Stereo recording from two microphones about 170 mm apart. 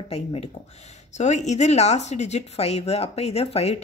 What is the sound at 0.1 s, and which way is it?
Speech, 35° left (ahead or behind).